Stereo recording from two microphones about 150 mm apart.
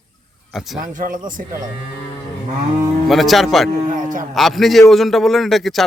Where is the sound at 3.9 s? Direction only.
65° right (ahead or behind).